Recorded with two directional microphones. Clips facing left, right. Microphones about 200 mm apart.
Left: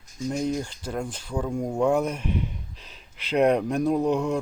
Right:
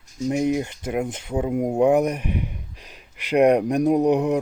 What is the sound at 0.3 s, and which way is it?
Speech, 65° right (ahead or behind).